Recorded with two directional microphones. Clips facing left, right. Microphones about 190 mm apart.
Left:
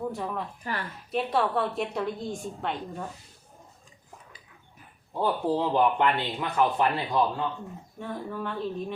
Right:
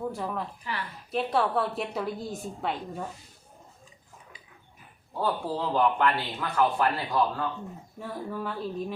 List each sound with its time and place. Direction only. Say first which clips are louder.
0.0 s speech: even; centre (ahead or behind)
0.6 s a woman's voice: left 2 dB; 45° left (ahead or behind)
1.1 s a woman's voice: even; centre (ahead or behind)
5.2 s speech: left 3 dB; 20° left (ahead or behind)
7.9 s a woman's voice: even; 5° right (ahead or behind)